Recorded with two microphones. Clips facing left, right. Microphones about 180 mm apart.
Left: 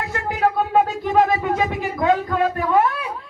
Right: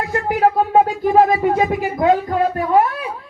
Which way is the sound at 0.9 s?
45° right (ahead or behind).